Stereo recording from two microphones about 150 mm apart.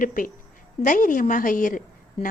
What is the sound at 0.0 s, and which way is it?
A woman's voice, 65° left (ahead or behind).